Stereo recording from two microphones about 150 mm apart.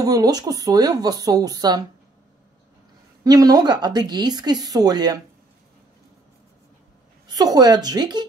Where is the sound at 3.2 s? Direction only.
25° right (ahead or behind).